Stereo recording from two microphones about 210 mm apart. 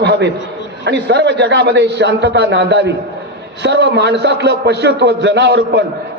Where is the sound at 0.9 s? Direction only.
55° right (ahead or behind).